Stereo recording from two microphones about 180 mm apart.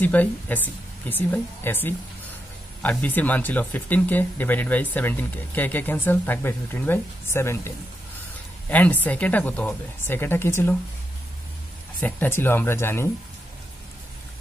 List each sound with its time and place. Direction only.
0.0 s speech: 10° left (ahead or behind)
12.0 s speech: 10° left (ahead or behind)